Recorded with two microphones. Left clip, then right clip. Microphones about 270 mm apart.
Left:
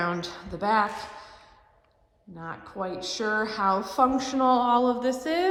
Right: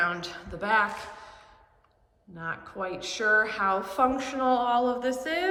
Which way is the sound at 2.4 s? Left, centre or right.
Centre.